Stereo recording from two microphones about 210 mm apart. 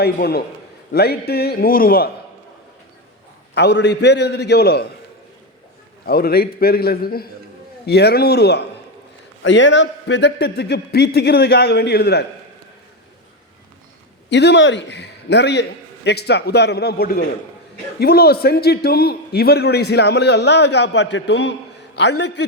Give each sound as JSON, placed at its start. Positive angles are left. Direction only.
{"t": 0.0, "sound": "a man's voice", "side_deg": 50}
{"t": 3.5, "sound": "a man's voice", "side_deg": 55}
{"t": 6.1, "sound": "a man's voice", "side_deg": 45}
{"t": 9.4, "sound": "a man's voice", "side_deg": 60}
{"t": 14.3, "sound": "a man's voice", "side_deg": 55}